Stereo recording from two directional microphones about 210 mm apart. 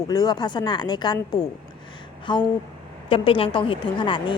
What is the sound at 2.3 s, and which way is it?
A woman's voice, 20° left (ahead or behind).